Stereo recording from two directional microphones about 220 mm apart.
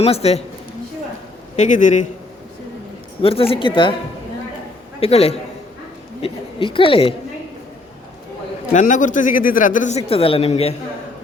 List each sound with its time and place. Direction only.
0.0 s a woman's voice: 30° left (ahead or behind)
1.5 s speech: 35° left (ahead or behind)
3.2 s a woman's voice: 25° left (ahead or behind)
4.9 s a man's voice: 25° left (ahead or behind)
8.7 s speech: 35° left (ahead or behind)